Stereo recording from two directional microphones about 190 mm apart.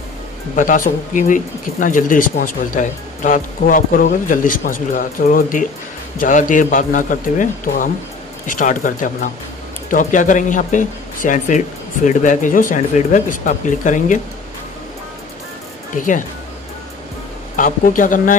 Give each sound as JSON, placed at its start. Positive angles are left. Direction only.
{"t": 0.6, "sound": "speech", "side_deg": 45}
{"t": 16.0, "sound": "speech", "side_deg": 45}
{"t": 17.6, "sound": "speech", "side_deg": 45}